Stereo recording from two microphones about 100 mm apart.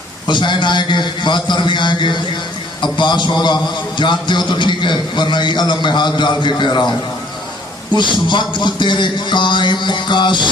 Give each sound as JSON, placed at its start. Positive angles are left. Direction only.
{"t": 0.3, "sound": "a man's voice", "side_deg": 50}
{"t": 7.9, "sound": "a man's voice", "side_deg": 50}